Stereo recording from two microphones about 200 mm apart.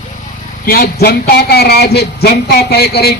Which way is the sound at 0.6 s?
50° left (ahead or behind).